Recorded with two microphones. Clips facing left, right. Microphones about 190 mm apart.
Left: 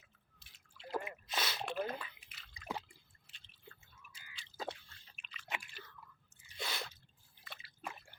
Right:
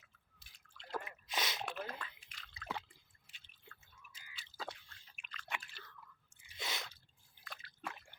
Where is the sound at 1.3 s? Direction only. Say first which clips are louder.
Even; 15° right (ahead or behind).